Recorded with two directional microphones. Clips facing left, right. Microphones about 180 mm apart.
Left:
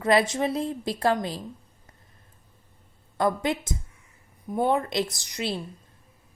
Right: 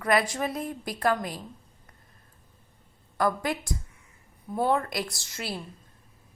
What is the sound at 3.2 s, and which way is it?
A woman's voice, 20° left (ahead or behind).